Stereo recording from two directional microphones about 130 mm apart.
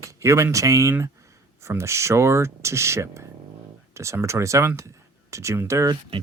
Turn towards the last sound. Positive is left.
turn(degrees=-25)  # may be behind; listen again after turning